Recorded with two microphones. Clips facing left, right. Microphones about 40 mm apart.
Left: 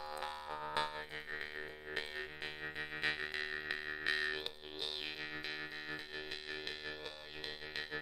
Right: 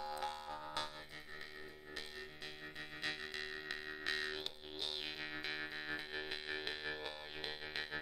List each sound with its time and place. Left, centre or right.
0.0 s music: centre
0.6 s music: left
2.0 s music: left; by 8.0 s centre